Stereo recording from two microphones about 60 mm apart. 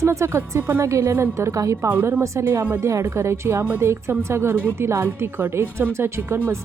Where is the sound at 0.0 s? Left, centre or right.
Right.